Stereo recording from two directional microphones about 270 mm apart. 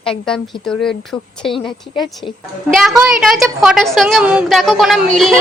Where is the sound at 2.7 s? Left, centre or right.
Centre.